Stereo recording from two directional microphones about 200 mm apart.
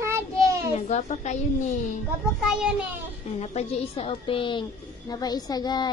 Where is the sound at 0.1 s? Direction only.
15° right (ahead or behind).